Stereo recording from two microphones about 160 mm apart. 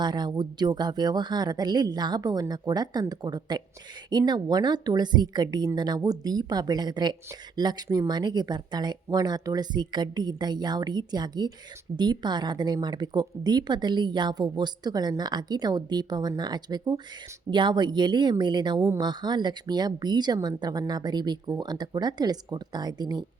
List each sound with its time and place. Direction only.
0.0 s a woman's voice: 25° right (ahead or behind)